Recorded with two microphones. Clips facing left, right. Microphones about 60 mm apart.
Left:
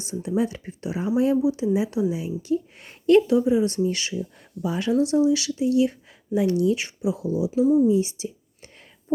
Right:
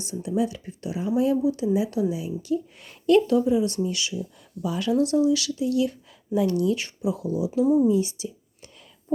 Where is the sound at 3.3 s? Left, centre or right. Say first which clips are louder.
Left 1 dB; centre; by 4.5 s left.